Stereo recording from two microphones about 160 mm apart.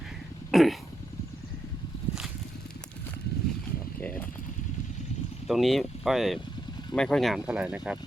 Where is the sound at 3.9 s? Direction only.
10° left (ahead or behind).